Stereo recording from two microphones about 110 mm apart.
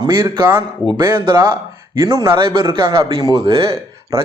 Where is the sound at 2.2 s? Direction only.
45° right (ahead or behind).